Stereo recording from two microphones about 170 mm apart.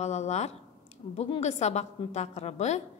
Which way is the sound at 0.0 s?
40° left (ahead or behind).